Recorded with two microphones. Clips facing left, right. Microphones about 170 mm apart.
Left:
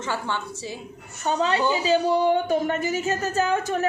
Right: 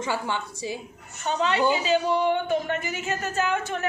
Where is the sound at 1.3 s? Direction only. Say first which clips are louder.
Left 1 dB; 35° left (ahead or behind).